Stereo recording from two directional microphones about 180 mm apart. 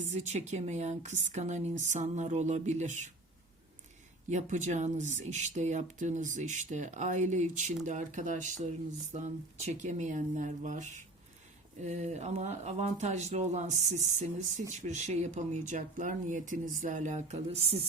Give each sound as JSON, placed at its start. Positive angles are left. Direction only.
{"t": 0.0, "sound": "speech", "side_deg": -40}
{"t": 4.3, "sound": "speech", "side_deg": -40}